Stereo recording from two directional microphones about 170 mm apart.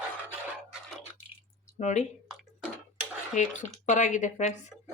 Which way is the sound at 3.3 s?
45° left (ahead or behind).